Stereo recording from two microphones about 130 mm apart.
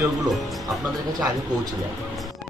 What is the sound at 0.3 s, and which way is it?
Music, centre (ahead or behind).